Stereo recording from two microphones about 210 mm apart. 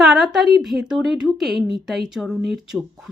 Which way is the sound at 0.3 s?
Centre (ahead or behind).